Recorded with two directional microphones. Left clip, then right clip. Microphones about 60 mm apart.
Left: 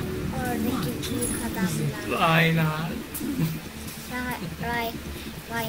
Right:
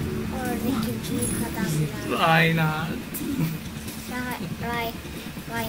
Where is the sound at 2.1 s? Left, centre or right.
Right.